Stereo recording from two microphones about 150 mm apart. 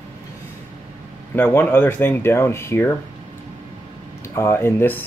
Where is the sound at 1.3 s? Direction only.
10° left (ahead or behind).